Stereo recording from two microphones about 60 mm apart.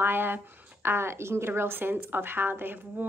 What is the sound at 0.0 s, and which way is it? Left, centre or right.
A woman's voice, right.